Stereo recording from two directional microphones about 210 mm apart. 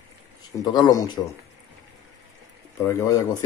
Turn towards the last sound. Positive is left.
turn(degrees=15)  # may be behind; listen again after turning